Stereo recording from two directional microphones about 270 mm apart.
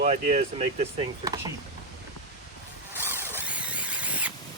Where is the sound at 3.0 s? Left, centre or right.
Centre.